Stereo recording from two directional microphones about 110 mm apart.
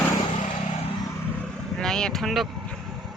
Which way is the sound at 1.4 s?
5° left (ahead or behind).